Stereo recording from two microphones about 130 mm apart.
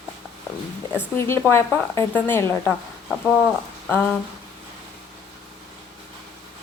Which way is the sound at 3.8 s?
15° left (ahead or behind).